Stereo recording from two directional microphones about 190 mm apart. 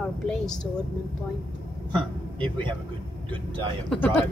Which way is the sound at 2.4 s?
25° right (ahead or behind).